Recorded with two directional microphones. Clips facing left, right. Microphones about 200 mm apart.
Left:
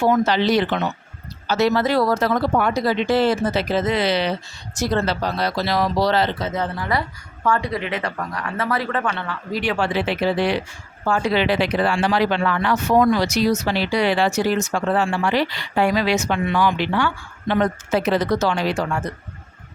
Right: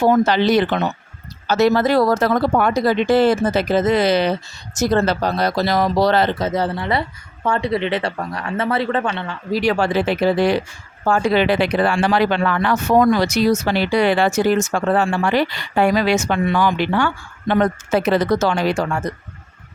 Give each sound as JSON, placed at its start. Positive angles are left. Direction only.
{"t": 0.0, "sound": "speech", "side_deg": -40}
{"t": 0.3, "sound": "speech", "side_deg": -50}
{"t": 9.5, "sound": "speech", "side_deg": -40}